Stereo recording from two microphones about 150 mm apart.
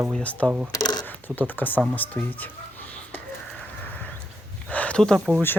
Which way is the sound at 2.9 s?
10° left (ahead or behind).